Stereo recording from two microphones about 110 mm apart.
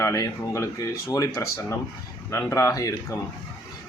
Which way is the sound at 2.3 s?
25° left (ahead or behind).